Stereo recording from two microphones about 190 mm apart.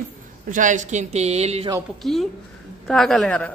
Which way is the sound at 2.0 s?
Centre (ahead or behind).